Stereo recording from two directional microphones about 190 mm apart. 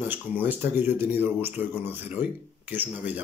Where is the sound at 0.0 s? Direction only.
10° right (ahead or behind).